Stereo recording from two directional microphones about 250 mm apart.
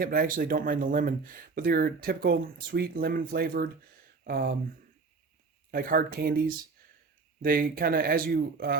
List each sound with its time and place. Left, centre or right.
0.0 s speech: right
5.7 s speech: right
7.4 s speech: right